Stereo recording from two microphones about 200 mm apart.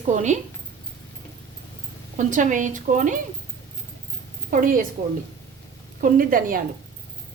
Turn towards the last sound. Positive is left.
turn(degrees=-45)  # may be behind; listen again after turning